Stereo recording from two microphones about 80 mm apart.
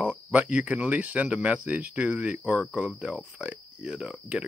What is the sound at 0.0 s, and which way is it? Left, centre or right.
Speech, centre.